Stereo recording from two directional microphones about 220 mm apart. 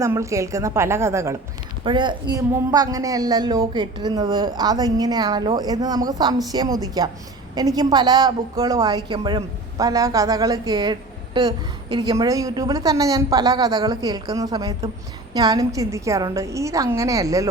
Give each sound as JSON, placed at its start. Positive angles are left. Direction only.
{"t": 0.0, "sound": "a woman's voice", "side_deg": -15}